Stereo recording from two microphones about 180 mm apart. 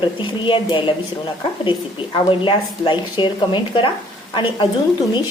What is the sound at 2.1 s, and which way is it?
A woman's voice, 30° left (ahead or behind).